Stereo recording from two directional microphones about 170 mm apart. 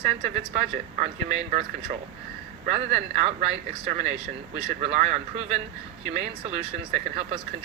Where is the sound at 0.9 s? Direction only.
40° right (ahead or behind).